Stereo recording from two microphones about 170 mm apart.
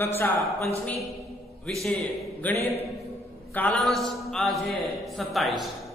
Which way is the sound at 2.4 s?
10° left (ahead or behind).